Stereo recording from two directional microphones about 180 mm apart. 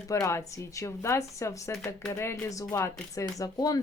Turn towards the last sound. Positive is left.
turn(degrees=20)  # may be behind; listen again after turning